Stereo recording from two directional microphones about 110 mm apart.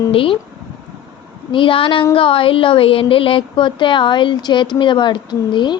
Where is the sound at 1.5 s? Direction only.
50° left (ahead or behind).